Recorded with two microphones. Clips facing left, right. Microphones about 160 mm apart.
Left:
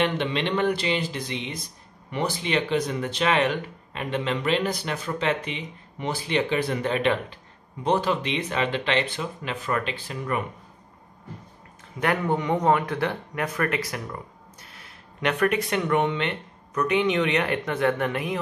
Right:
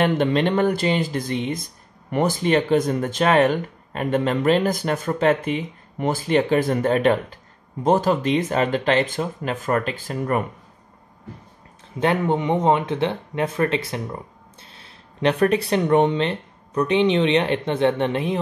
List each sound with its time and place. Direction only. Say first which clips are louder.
0.0 s speech: right 6 dB; 45° right (ahead or behind)
12.0 s speech: right 4 dB; 25° right (ahead or behind)